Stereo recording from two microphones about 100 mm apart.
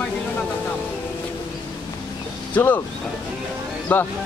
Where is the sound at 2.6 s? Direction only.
25° left (ahead or behind).